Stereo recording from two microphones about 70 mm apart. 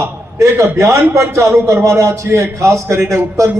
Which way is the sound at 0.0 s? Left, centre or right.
Right.